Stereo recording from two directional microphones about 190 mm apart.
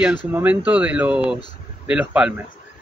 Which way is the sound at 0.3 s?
10° right (ahead or behind).